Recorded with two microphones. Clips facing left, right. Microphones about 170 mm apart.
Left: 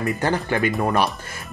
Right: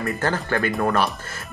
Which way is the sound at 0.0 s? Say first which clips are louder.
Left 2 dB; 15° left (ahead or behind).